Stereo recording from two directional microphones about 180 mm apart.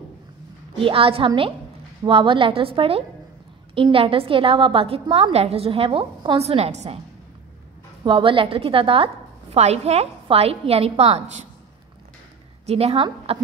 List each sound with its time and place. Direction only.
0.7 s a woman's voice: 30° right (ahead or behind)
8.0 s a woman's voice: 30° right (ahead or behind)
12.6 s a woman's voice: 35° right (ahead or behind)